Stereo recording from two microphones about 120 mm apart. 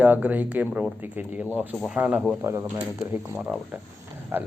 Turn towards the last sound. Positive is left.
turn(degrees=-15)  # may be behind; listen again after turning